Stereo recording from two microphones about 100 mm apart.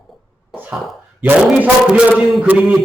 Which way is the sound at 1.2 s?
15° right (ahead or behind).